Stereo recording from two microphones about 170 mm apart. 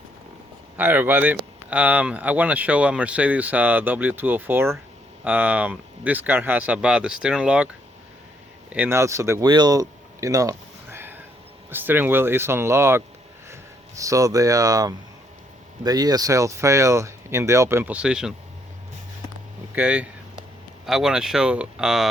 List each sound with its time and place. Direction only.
0.8 s speech: 10° right (ahead or behind)
8.7 s speech: 10° right (ahead or behind)
19.7 s a sound: 5° right (ahead or behind)
20.8 s speech: 5° right (ahead or behind)